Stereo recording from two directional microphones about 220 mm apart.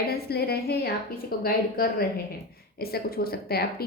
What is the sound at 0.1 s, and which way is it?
A woman's voice, 45° left (ahead or behind).